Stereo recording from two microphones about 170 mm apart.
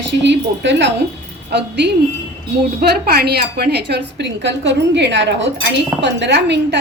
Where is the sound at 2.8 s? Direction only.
65° right (ahead or behind).